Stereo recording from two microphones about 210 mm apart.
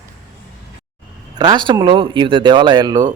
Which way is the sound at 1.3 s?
20° right (ahead or behind).